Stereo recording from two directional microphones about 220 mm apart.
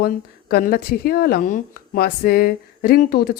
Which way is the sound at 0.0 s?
45° left (ahead or behind).